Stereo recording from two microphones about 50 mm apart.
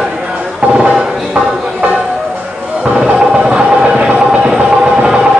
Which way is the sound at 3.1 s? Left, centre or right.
Centre.